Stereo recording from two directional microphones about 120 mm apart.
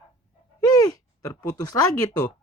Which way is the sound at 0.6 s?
30° left (ahead or behind).